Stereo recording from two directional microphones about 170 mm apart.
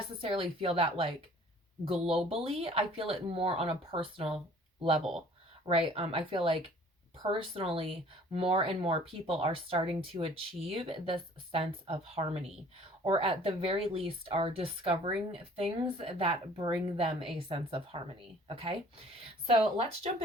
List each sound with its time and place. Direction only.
0.2 s speech: 35° right (ahead or behind)